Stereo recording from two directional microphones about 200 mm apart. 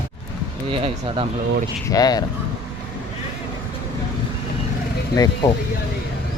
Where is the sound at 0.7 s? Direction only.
25° right (ahead or behind).